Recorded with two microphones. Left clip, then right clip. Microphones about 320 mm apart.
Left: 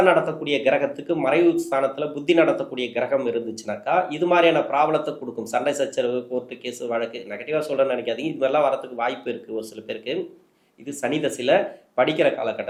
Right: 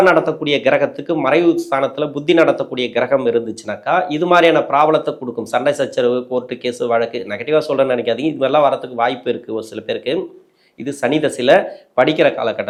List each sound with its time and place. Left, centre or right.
0.0 s speech: right